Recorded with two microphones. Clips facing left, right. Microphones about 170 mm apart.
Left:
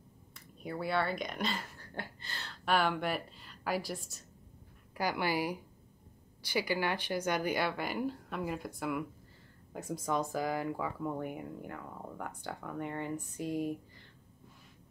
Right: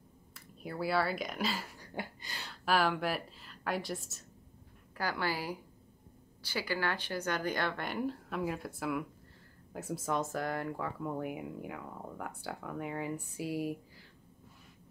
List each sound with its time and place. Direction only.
0.3 s speech: 5° right (ahead or behind)
4.9 s speech: 15° left (ahead or behind); by 14.0 s 5° right (ahead or behind)